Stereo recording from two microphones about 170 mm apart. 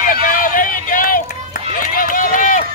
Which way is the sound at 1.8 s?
55° left (ahead or behind).